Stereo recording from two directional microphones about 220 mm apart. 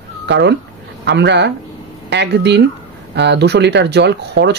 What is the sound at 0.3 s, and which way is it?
A woman's voice, 50° right (ahead or behind).